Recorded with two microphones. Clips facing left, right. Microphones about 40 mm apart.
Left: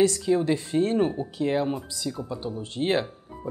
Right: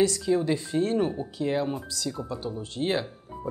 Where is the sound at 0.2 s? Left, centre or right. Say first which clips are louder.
Left 1 dB; left.